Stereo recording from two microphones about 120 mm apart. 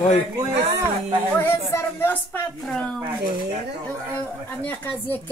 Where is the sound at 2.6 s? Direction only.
Centre (ahead or behind).